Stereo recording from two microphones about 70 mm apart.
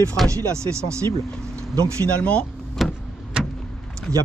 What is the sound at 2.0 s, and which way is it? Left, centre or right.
Speech, centre.